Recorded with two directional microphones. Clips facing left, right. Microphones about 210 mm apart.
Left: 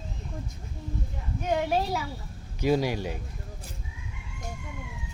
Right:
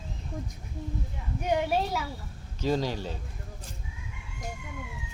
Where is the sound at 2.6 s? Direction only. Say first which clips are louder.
Left 3 dB; 10° left (ahead or behind).